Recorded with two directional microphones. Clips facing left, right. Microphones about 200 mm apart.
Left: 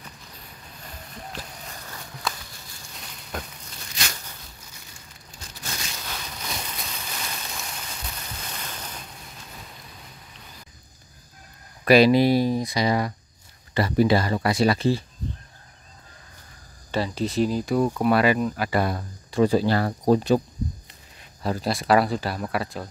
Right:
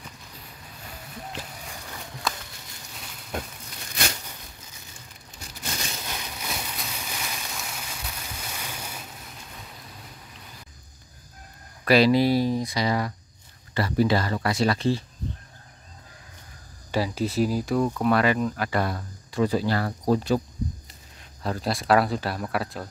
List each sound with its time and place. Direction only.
1.3 s boat: 15° right (ahead or behind)
6.0 s a sound: 10° right (ahead or behind)
11.8 s speech: 15° left (ahead or behind)
16.9 s speech: 10° right (ahead or behind)
17.7 s speech: 10° left (ahead or behind)
18.9 s speech: 25° left (ahead or behind)
21.4 s speech: 5° left (ahead or behind)